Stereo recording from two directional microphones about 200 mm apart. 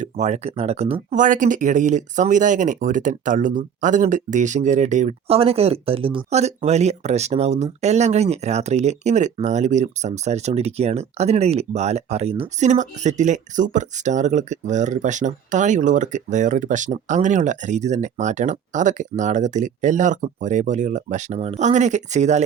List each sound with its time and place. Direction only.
0.0 s speech: 35° right (ahead or behind)